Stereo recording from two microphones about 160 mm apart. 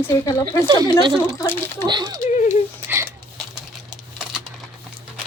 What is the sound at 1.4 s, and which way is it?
Speech, 10° left (ahead or behind).